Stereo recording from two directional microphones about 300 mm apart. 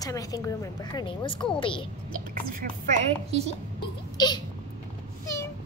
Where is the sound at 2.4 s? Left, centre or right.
Right.